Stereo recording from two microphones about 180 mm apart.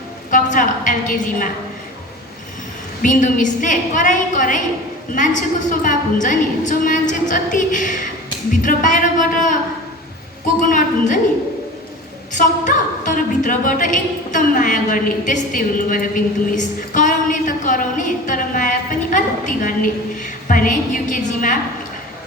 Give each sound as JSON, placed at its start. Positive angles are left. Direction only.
{"t": 0.3, "sound": "a woman's voice", "side_deg": 45}
{"t": 3.0, "sound": "a woman's voice", "side_deg": 45}
{"t": 10.6, "sound": "a woman's voice", "side_deg": 45}
{"t": 12.3, "sound": "a woman's voice", "side_deg": 45}
{"t": 19.1, "sound": "a sound", "side_deg": 45}
{"t": 20.5, "sound": "a woman's voice", "side_deg": 50}